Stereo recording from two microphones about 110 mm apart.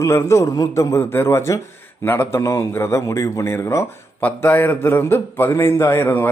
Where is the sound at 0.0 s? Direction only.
25° left (ahead or behind).